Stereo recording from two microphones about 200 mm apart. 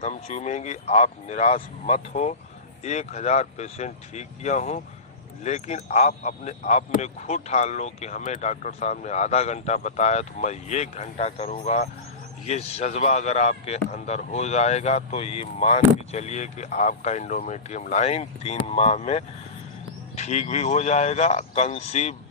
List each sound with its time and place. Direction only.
0.0 s speech: 35° left (ahead or behind)